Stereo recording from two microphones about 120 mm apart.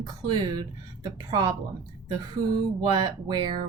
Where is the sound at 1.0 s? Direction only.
30° right (ahead or behind).